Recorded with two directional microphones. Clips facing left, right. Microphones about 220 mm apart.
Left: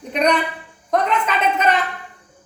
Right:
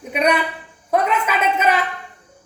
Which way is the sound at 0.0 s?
10° right (ahead or behind).